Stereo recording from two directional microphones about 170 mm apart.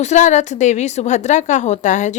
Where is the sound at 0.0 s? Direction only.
45° left (ahead or behind).